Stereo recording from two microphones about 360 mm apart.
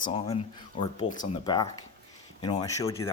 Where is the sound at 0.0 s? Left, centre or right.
Centre.